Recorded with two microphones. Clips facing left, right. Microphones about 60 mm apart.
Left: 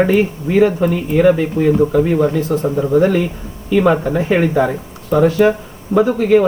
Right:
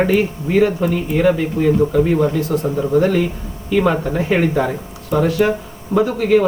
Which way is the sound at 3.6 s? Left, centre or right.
Centre.